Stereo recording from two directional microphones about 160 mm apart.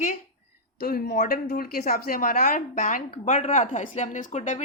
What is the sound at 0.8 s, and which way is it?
A woman's voice, 75° left (ahead or behind).